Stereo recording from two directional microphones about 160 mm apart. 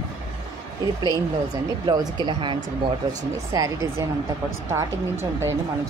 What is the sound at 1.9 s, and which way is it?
Speech, 25° right (ahead or behind).